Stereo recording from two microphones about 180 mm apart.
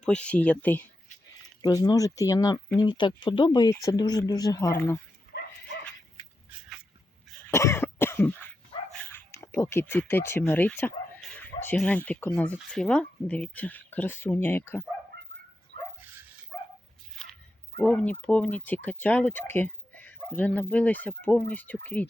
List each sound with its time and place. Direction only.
0.0 s speech: 5° left (ahead or behind)
1.6 s speech: 20° left (ahead or behind)
7.4 s cough: 15° left (ahead or behind)
11.3 s speech: 10° left (ahead or behind)
17.7 s speech: 10° left (ahead or behind)